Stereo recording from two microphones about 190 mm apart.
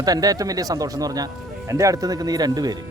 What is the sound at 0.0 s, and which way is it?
Speech, 20° right (ahead or behind).